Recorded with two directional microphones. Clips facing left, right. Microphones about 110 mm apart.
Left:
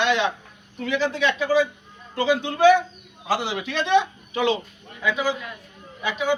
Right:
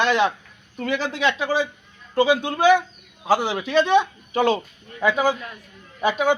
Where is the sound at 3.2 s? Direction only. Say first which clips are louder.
Right 4 dB; 40° right (ahead or behind).